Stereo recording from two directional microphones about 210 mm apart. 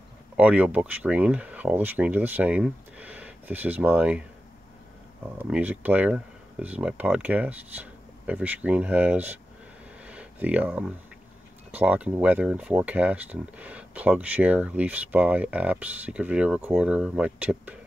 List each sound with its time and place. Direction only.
0.4 s speech: 5° right (ahead or behind)
5.4 s speech: 10° right (ahead or behind)
10.0 s a sound: 5° right (ahead or behind)
11.7 s speech: 5° right (ahead or behind)